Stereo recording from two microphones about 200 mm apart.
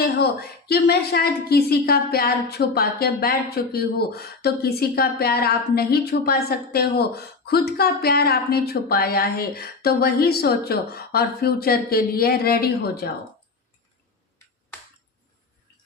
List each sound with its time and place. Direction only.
0.0 s a woman's voice: 50° left (ahead or behind)